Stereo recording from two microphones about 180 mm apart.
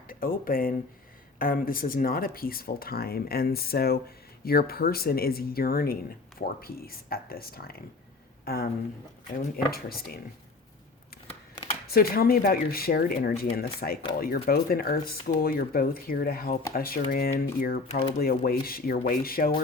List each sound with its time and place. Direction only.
0.1 s speech: 50° left (ahead or behind)
11.9 s speech: 55° left (ahead or behind)